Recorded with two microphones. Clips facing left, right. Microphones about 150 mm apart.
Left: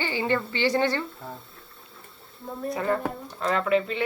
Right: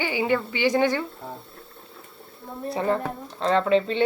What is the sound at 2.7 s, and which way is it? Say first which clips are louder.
Speech: right 2 dB; 25° right (ahead or behind).